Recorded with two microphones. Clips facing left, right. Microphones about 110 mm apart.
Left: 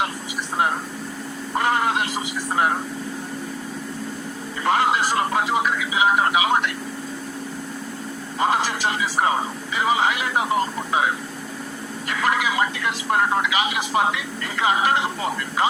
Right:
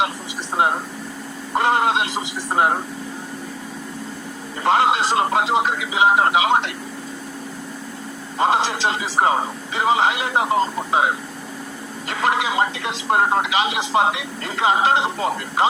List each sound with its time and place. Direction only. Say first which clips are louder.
0.5 s speech: right 3 dB; 20° right (ahead or behind)
4.6 s speech: right 3 dB; 20° right (ahead or behind)
8.4 s speech: right 3 dB; 25° right (ahead or behind)
12.1 s speech: right 2 dB; 25° right (ahead or behind)